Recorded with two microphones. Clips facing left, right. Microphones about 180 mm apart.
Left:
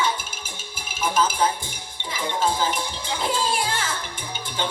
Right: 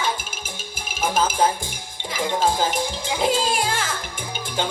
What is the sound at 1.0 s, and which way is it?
Music, 45° right (ahead or behind).